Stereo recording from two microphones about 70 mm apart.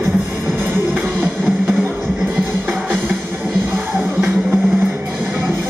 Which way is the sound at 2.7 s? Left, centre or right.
Right.